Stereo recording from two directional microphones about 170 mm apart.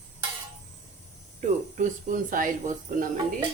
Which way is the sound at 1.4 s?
50° right (ahead or behind).